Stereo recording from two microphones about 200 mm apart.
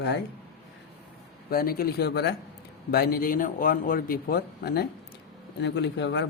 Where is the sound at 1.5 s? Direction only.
50° left (ahead or behind).